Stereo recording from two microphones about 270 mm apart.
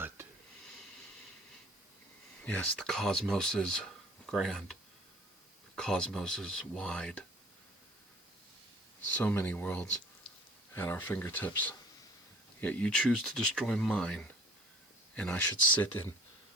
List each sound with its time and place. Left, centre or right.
2.4 s speech: centre
9.1 s speech: centre